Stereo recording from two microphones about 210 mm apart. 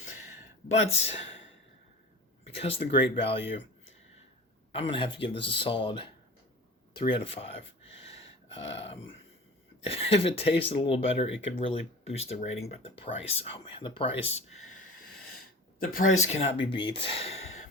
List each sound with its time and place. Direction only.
0.9 s speech: 30° left (ahead or behind)
2.6 s speech: 30° left (ahead or behind)
4.7 s speech: 25° left (ahead or behind)
8.5 s speech: 30° left (ahead or behind)
16.0 s speech: 35° left (ahead or behind)